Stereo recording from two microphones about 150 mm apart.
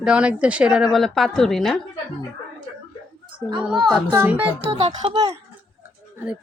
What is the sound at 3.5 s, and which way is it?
Speech, 5° right (ahead or behind).